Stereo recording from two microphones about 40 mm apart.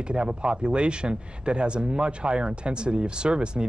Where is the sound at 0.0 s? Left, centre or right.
Right.